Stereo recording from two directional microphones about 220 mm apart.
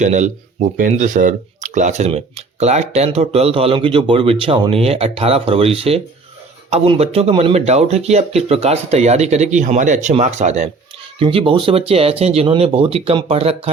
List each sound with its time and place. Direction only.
0.0 s speech: 35° right (ahead or behind)